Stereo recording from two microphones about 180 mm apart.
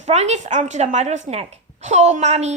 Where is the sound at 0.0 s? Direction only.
40° right (ahead or behind).